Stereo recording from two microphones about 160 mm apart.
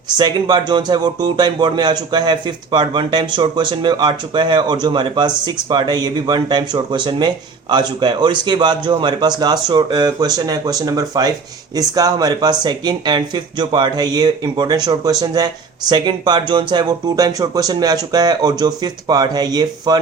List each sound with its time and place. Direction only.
0.2 s speech: 25° right (ahead or behind)